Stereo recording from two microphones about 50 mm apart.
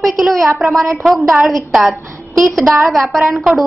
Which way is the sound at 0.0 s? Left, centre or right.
Centre.